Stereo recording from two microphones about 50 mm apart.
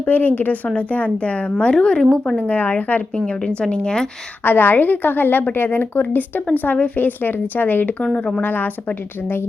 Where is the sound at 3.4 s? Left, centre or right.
Centre.